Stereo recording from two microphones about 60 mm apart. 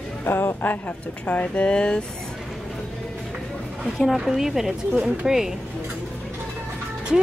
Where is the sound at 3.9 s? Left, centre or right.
Centre.